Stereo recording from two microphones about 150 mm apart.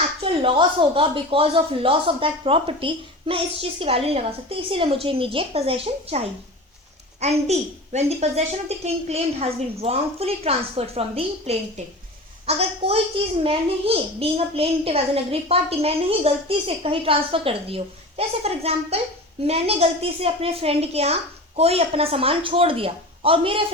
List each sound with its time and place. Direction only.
0.2 s a child's voice: 35° right (ahead or behind)